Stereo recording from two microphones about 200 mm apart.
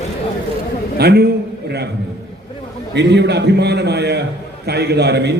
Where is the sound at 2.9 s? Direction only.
60° right (ahead or behind).